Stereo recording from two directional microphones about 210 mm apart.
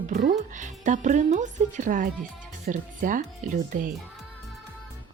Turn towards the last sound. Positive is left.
turn(degrees=-40)  # may be behind; listen again after turning